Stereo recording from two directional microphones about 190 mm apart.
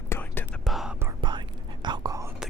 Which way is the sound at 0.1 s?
10° left (ahead or behind).